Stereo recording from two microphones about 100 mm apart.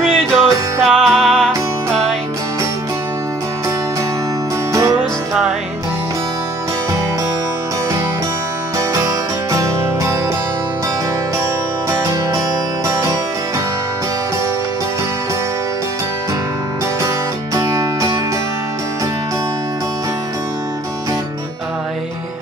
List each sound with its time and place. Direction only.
0.0 s music: centre (ahead or behind)
8.7 s music: 30° right (ahead or behind)
11.9 s music: 30° right (ahead or behind)